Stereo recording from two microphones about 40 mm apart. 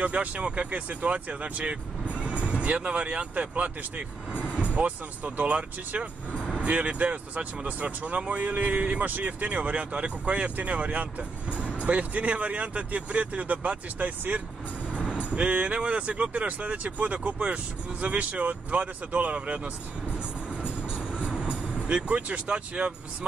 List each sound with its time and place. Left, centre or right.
0.0 s speech: right
15.0 s music: right
15.3 s speech: right
20.6 s vehicle: right